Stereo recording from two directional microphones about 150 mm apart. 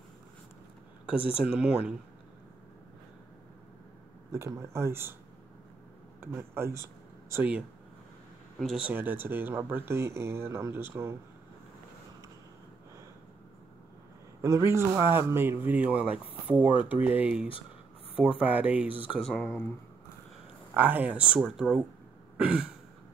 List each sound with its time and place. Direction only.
1.3 s speech: 5° right (ahead or behind)
4.3 s a man's voice: 20° right (ahead or behind)
6.2 s a man's voice: 15° right (ahead or behind)
14.4 s a man's voice: 20° right (ahead or behind)
18.9 s speech: 35° left (ahead or behind)
19.3 s speech: 5° left (ahead or behind)
20.7 s a man's voice: 10° right (ahead or behind)